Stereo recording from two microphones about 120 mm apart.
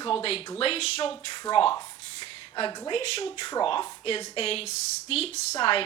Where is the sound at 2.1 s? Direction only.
45° left (ahead or behind).